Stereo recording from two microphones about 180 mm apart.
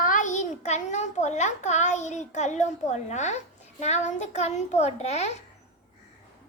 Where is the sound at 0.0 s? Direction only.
45° left (ahead or behind).